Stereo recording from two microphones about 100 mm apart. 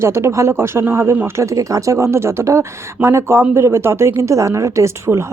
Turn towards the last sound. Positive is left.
turn(degrees=-30)  # may be behind; listen again after turning